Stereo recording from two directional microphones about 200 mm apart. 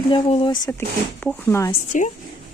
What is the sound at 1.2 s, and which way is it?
Speech, 10° left (ahead or behind).